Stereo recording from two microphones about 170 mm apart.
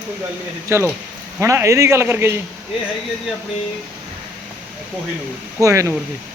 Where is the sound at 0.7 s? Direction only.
15° right (ahead or behind).